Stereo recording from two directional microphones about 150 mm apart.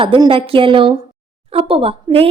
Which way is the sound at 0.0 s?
35° right (ahead or behind).